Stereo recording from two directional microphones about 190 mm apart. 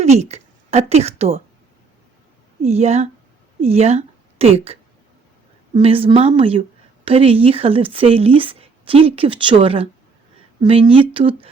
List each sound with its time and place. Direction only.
0.0 s speech: 35° right (ahead or behind)
2.6 s a woman's voice: 35° right (ahead or behind)